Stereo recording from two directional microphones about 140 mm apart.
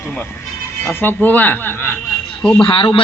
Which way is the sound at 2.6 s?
35° left (ahead or behind).